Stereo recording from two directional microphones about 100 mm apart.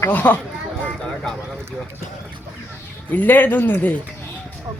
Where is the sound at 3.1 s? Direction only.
20° left (ahead or behind).